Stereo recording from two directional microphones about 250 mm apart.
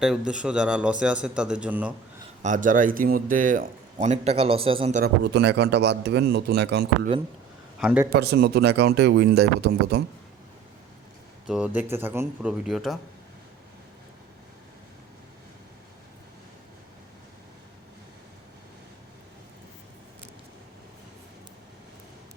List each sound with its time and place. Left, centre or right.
0.0 s a man's voice: centre
2.4 s a man's voice: right
5.0 s a man's voice: right
7.8 s a man's voice: centre
8.1 s speech: right
11.4 s a man's voice: centre